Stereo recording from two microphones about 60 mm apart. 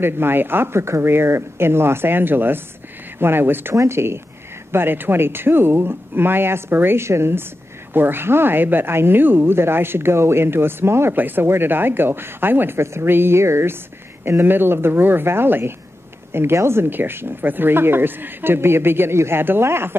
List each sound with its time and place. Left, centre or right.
0.0 s speech: right
3.7 s speech: right
4.7 s speech: right